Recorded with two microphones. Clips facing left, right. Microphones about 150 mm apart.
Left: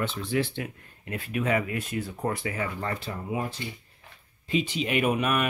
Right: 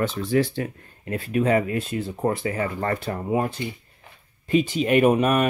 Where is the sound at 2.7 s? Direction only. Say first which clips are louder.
Right 7 dB; 55° right (ahead or behind).